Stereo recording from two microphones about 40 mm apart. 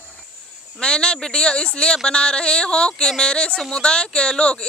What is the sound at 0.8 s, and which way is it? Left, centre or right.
Speech, left.